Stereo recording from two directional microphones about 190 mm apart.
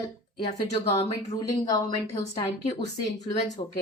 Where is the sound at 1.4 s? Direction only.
20° left (ahead or behind).